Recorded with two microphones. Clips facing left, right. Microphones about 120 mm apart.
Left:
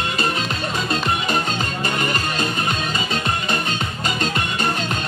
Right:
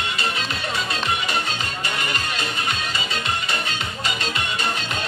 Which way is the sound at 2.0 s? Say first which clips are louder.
Left 4 dB; 40° left (ahead or behind).